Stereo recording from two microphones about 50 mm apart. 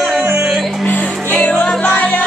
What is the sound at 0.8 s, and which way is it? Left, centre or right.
Music, left.